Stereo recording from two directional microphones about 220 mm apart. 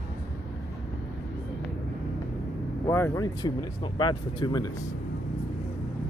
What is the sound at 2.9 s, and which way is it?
Speech, 10° left (ahead or behind).